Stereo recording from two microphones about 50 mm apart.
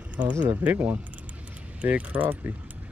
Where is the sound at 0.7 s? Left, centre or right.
Right.